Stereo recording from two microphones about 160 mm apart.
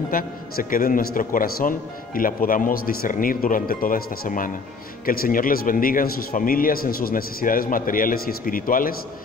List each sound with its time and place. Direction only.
0.1 s a man's voice: 60° left (ahead or behind)